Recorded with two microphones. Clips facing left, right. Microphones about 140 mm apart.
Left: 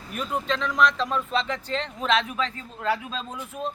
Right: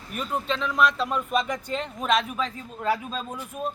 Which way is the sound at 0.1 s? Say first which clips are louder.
Left 1 dB; centre (ahead or behind).